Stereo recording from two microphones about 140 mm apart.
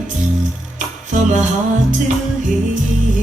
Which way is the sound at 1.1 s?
60° right (ahead or behind).